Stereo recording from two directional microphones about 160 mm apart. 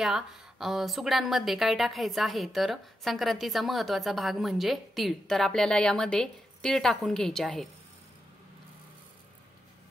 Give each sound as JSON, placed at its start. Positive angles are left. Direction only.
{"t": 0.0, "sound": "a woman's voice", "side_deg": 0}